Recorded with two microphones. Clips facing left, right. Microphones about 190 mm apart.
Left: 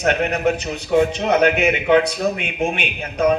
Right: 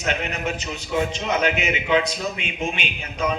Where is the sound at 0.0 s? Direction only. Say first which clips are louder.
Left 8 dB; 60° left (ahead or behind).